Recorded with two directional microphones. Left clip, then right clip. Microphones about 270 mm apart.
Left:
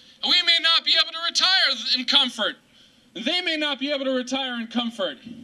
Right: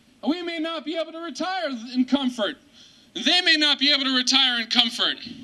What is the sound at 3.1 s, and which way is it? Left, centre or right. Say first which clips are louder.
A man's voice: right 5 dB; centre.